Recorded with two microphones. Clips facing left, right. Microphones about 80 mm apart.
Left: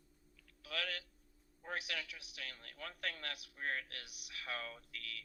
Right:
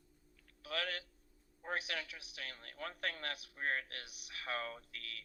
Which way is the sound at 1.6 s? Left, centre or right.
Right.